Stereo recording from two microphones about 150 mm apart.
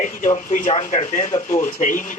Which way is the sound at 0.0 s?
60° left (ahead or behind).